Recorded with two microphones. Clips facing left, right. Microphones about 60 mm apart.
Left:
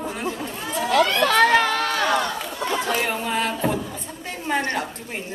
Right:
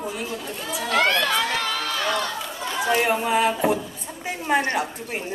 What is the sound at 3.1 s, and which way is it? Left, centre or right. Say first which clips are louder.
A woman's voice: right 4 dB; centre.